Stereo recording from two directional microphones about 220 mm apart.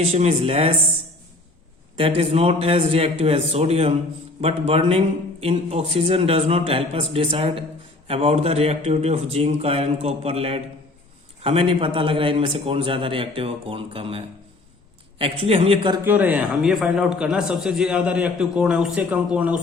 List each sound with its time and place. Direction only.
0.0 s a man's voice: 30° right (ahead or behind)
2.0 s a man's voice: 25° right (ahead or behind)
16.0 s a man's voice: 5° right (ahead or behind)